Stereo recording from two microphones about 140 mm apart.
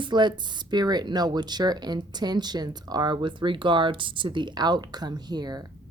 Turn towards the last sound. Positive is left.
turn(degrees=-30)  # may be behind; listen again after turning